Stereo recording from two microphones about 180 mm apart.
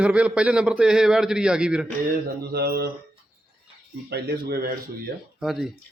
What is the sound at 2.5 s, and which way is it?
Speech, 60° right (ahead or behind).